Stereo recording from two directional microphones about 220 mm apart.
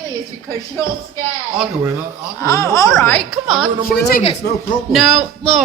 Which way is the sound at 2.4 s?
15° left (ahead or behind).